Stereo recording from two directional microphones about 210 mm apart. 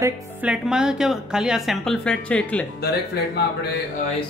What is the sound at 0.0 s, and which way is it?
Speech, 5° right (ahead or behind).